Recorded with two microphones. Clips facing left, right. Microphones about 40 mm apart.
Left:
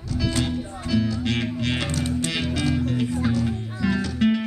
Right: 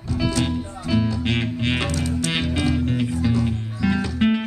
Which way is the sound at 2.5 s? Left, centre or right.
Centre.